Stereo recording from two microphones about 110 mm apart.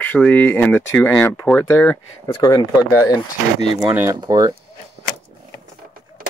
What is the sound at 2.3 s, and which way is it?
Speech, 40° left (ahead or behind).